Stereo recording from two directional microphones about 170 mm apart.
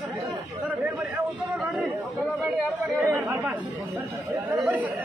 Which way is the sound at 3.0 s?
15° right (ahead or behind).